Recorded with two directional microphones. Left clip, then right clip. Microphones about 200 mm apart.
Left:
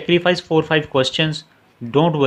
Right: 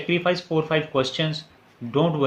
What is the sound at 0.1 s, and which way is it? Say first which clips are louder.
Speech: left 7 dB; 55° left (ahead or behind).